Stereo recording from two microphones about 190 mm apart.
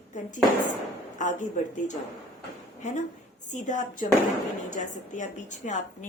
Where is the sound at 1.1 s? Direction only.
40° left (ahead or behind).